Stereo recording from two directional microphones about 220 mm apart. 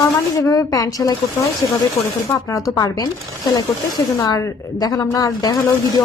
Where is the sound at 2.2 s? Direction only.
15° left (ahead or behind).